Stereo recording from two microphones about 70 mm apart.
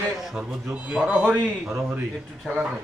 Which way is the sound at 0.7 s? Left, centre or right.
Centre.